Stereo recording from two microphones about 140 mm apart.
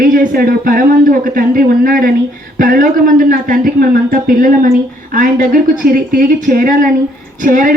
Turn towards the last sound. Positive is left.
turn(degrees=-70)  # may be behind; listen again after turning